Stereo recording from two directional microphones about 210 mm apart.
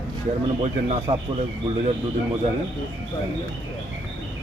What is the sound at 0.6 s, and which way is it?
Speech, 30° right (ahead or behind).